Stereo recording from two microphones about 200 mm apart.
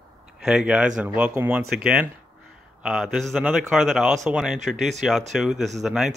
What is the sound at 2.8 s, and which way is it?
A man's voice, centre (ahead or behind).